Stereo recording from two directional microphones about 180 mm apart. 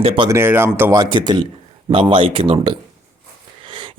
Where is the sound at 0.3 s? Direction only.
15° right (ahead or behind).